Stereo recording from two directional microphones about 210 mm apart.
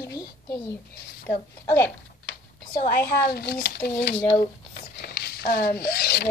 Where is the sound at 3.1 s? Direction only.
50° left (ahead or behind).